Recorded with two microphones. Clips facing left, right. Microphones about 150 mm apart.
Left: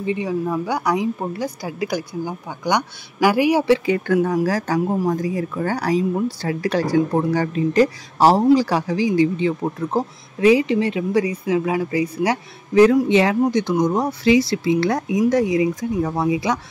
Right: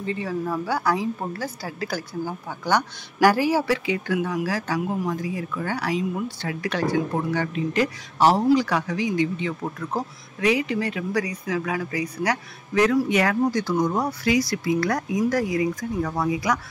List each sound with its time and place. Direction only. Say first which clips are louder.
0.0 s speech: left 5 dB; 15° left (ahead or behind)
3.8 s speech: left 6 dB; 45° left (ahead or behind); by 16.5 s 25° left (ahead or behind)